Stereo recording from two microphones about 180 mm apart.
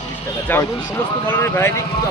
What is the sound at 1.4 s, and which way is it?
Speech, 15° left (ahead or behind).